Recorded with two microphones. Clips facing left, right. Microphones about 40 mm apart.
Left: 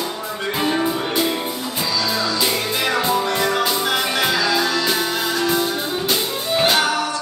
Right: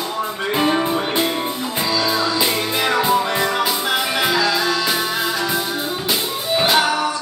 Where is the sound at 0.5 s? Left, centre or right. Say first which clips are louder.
Right 2 dB; centre.